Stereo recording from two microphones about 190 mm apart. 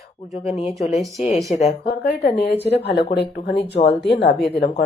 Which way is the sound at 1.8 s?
55° left (ahead or behind).